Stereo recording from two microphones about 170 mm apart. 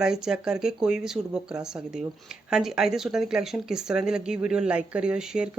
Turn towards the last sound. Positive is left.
turn(degrees=-5)  # may be behind; listen again after turning